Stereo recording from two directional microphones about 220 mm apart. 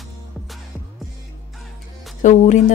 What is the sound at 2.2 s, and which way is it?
Speech, 35° left (ahead or behind).